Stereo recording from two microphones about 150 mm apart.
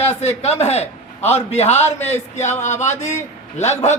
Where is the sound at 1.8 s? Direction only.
15° left (ahead or behind).